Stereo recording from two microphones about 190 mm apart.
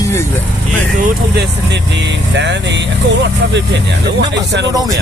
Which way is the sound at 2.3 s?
65° right (ahead or behind).